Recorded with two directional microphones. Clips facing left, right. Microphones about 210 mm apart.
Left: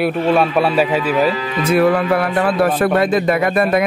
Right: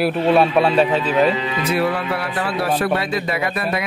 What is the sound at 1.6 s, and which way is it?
Speech, 50° left (ahead or behind).